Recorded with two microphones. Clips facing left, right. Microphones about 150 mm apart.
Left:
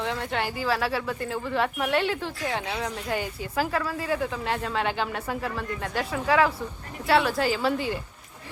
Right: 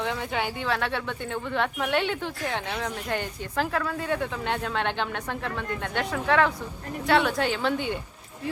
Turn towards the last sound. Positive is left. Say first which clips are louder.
# left 1 dB
turn(degrees=0)  # may be behind; listen again after turning